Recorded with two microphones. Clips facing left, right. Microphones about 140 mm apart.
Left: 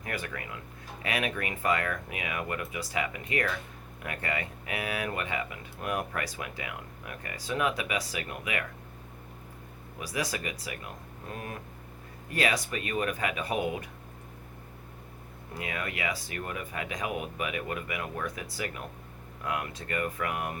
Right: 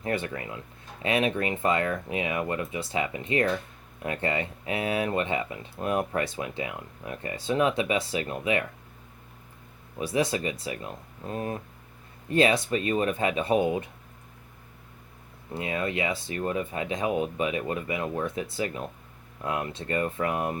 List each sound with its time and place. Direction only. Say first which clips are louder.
0.0 s speech: right 7 dB; 25° right (ahead or behind)
10.0 s speech: right 7 dB; 25° right (ahead or behind)
15.5 s speech: right 7 dB; 25° right (ahead or behind)